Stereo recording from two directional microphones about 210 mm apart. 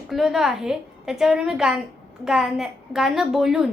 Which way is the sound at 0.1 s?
Centre (ahead or behind).